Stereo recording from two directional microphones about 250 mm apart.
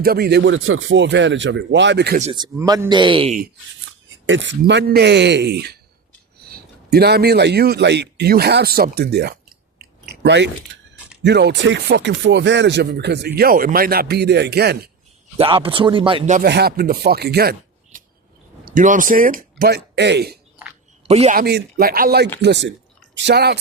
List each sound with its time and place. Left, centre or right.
0.0 s speech: right
2.3 s speech: centre
4.3 s speech: right
9.7 s chewing: right
11.2 s speech: right
15.4 s speech: right
16.5 s speech: right
21.1 s speech: right